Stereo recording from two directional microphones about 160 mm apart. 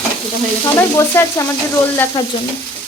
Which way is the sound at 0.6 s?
15° left (ahead or behind).